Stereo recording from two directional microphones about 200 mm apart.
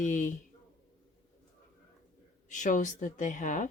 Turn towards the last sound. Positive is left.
turn(degrees=40)  # may be behind; listen again after turning